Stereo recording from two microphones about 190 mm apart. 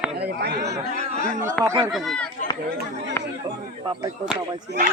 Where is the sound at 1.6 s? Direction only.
25° right (ahead or behind).